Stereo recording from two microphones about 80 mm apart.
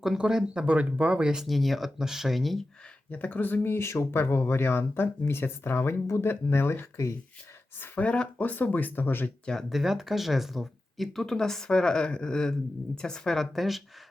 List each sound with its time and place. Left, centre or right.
0.0 s speech: centre
3.1 s speech: left
7.8 s speech: centre
9.5 s speech: centre